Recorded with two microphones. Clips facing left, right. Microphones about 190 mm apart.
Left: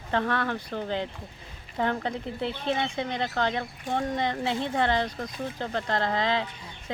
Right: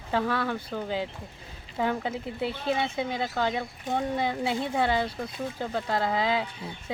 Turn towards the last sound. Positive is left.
turn(degrees=-5)  # may be behind; listen again after turning